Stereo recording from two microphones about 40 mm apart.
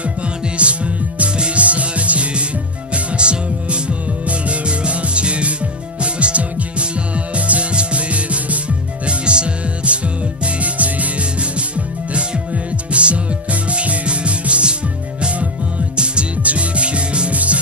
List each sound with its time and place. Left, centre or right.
0.6 s music: right
10.4 s music: right
16.0 s music: right